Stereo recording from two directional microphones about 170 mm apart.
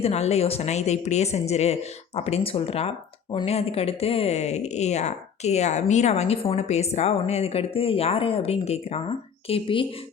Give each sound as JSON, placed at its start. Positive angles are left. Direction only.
{"t": 0.0, "sound": "speech", "side_deg": 40}